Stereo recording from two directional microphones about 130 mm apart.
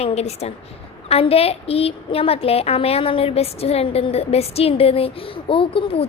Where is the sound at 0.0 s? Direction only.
55° left (ahead or behind).